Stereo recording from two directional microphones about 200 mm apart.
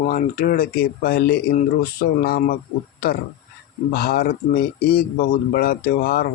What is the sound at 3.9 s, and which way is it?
Speech, 50° left (ahead or behind).